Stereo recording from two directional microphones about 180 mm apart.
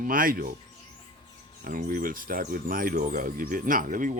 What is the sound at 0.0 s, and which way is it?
Speech, 50° right (ahead or behind).